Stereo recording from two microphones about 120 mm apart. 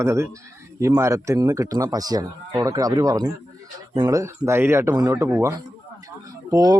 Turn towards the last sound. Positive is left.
turn(degrees=-30)  # may be behind; listen again after turning